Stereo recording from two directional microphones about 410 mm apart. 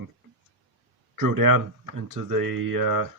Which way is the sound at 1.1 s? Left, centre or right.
Right.